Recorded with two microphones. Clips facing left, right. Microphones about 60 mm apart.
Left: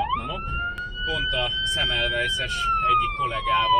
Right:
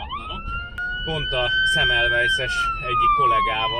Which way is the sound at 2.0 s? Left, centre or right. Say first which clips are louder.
Right 6 dB; centre.